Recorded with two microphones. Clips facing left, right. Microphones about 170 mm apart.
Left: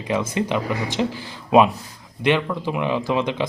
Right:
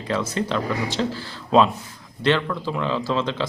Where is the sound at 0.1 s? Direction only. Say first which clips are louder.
Left 2 dB; 15° left (ahead or behind).